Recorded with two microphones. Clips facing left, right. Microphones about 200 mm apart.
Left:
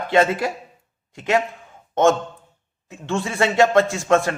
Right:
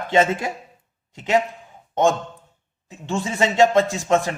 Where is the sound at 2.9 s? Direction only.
20° right (ahead or behind).